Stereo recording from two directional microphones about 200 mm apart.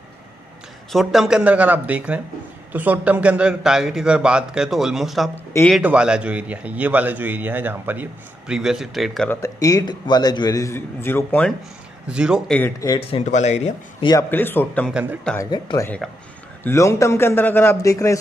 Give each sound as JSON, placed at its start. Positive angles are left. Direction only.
{"t": 0.9, "sound": "a man's voice", "side_deg": 0}
{"t": 5.3, "sound": "a man's voice", "side_deg": 10}
{"t": 5.8, "sound": "a man's voice", "side_deg": -5}
{"t": 9.4, "sound": "a man's voice", "side_deg": 15}
{"t": 12.1, "sound": "a man's voice", "side_deg": -5}
{"t": 12.5, "sound": "a man's voice", "side_deg": 15}
{"t": 13.2, "sound": "speech", "side_deg": 35}
{"t": 14.0, "sound": "a man's voice", "side_deg": 15}
{"t": 15.3, "sound": "a man's voice", "side_deg": 20}